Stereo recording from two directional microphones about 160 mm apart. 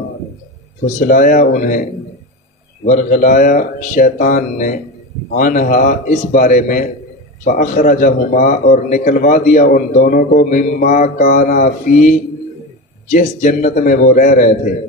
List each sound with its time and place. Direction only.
0.9 s a man's voice: 55° left (ahead or behind)
11.2 s a man's voice: 60° left (ahead or behind)